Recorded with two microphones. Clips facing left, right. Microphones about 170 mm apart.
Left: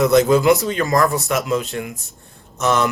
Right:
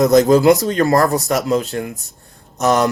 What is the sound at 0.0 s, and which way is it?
Speech, 40° right (ahead or behind).